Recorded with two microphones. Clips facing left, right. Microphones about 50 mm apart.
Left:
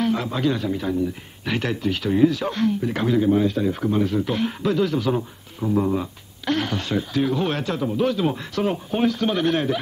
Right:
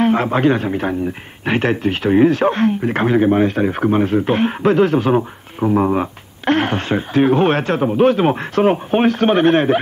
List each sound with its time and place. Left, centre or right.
0.0 s a man's voice: right